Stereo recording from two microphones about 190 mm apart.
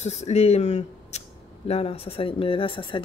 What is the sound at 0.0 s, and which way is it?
Speech, 35° left (ahead or behind).